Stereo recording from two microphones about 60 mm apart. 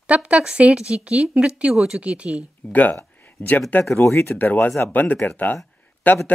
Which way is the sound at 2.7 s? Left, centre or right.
Left.